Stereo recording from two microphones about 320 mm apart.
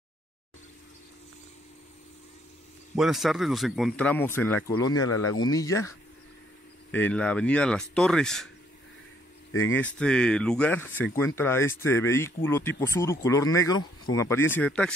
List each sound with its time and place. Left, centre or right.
3.0 s speech: centre
5.0 s speech: left
5.5 s speech: centre
9.5 s speech: left
9.8 s speech: centre